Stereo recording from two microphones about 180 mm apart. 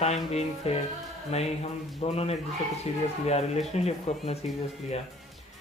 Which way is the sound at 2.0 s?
35° left (ahead or behind).